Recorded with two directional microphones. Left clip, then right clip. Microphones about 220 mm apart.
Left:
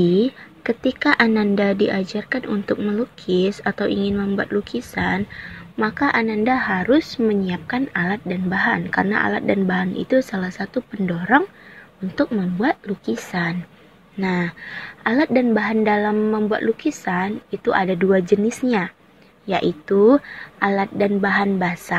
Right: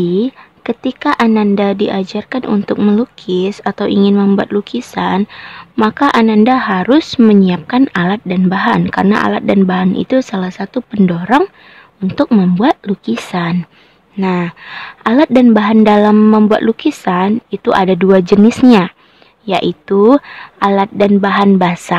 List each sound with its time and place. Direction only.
0.0 s a woman's voice: 15° right (ahead or behind)
12.5 s a woman's voice: 20° right (ahead or behind)